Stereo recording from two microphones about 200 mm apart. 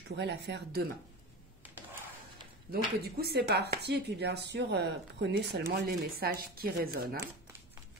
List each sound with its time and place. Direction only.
0.1 s speech: 60° right (ahead or behind)
2.7 s speech: 50° right (ahead or behind)